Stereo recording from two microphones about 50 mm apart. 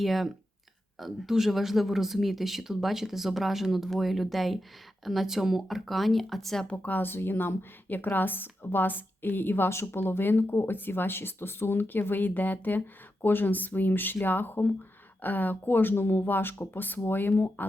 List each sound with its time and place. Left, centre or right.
0.0 s speech: centre
6.7 s a woman's voice: left